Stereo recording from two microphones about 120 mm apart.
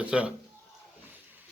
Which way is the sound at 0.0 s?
10° right (ahead or behind).